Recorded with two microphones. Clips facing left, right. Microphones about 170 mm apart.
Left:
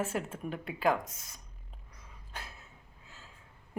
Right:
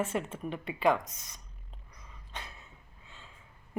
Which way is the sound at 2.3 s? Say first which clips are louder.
Right 1 dB; 5° left (ahead or behind).